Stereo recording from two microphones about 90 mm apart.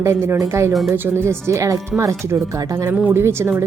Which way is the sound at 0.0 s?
30° right (ahead or behind).